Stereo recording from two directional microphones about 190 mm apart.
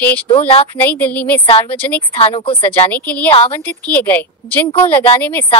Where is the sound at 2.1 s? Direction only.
30° left (ahead or behind).